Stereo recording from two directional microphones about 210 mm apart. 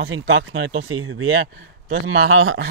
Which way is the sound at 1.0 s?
85° right.